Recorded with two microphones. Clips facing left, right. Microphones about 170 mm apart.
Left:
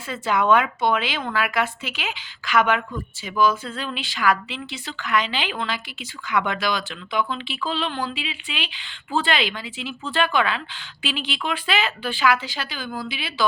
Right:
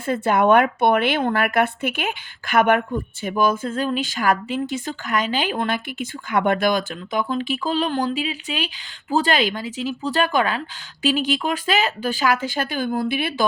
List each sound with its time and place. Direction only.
0.1 s speech: 55° right (ahead or behind)